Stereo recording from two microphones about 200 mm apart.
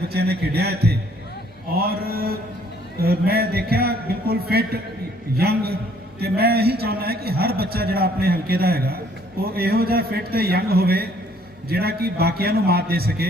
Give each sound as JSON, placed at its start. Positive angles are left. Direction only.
{"t": 0.1, "sound": "a man's voice", "side_deg": -50}